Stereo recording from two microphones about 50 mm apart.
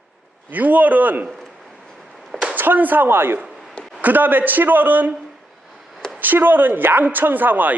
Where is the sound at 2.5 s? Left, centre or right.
Right.